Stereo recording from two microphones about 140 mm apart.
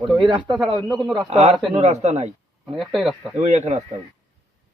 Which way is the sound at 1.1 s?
50° right (ahead or behind).